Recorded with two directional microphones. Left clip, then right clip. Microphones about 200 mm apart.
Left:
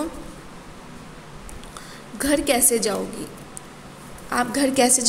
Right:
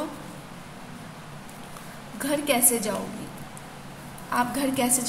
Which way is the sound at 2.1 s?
35° left (ahead or behind).